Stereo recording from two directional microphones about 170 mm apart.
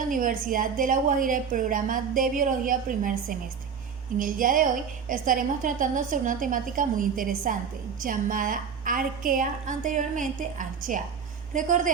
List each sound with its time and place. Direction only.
0.1 s a woman's voice: 50° right (ahead or behind)